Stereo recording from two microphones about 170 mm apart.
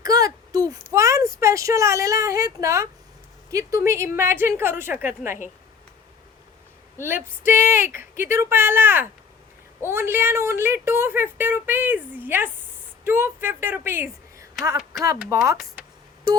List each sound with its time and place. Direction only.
0.0 s a sound: 20° right (ahead or behind)
3.5 s a woman's voice: 20° right (ahead or behind)
7.4 s a woman's voice: 15° right (ahead or behind)